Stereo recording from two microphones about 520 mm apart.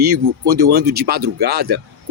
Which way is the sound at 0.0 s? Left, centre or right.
Right.